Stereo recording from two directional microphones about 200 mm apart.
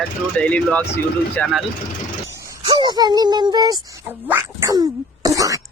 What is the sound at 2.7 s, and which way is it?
Speech, 25° right (ahead or behind).